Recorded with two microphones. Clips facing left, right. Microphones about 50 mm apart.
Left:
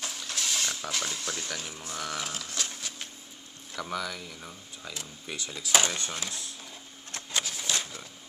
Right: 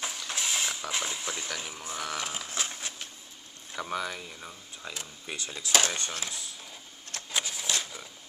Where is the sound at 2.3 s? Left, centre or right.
Right.